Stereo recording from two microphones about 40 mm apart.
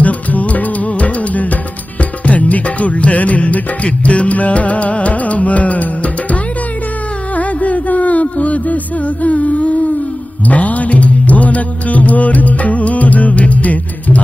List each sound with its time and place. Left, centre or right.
0.0 s music: left